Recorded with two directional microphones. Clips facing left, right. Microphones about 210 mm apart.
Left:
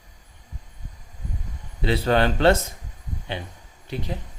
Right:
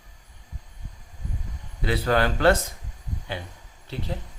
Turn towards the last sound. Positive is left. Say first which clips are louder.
# left 2 dB
turn(degrees=15)  # may be behind; listen again after turning